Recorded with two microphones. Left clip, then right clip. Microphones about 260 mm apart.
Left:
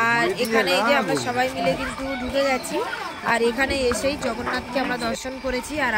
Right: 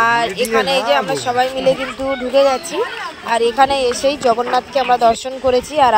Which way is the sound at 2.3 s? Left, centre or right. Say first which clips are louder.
Right 9 dB; right.